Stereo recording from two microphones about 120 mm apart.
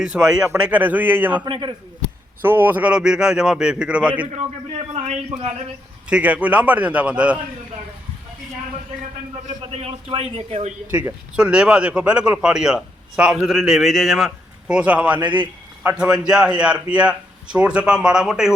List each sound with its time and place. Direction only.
0.0 s a man's voice: 5° right (ahead or behind)
1.5 s a man's voice: 40° right (ahead or behind)
2.4 s a man's voice: 15° right (ahead or behind)
4.9 s speech: 65° right (ahead or behind)
6.1 s a man's voice: 10° right (ahead or behind)
9.5 s a man's voice: 75° right (ahead or behind)
10.1 s speech: 55° right (ahead or behind)
11.3 s a man's voice: 10° right (ahead or behind)